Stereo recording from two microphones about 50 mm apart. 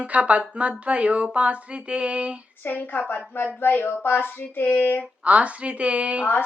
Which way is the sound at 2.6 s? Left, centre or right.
Left.